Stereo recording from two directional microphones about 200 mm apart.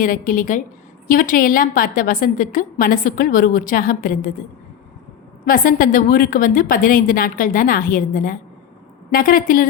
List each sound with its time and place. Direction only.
0.0 s a woman's voice: 45° left (ahead or behind)
5.5 s a woman's voice: 45° left (ahead or behind)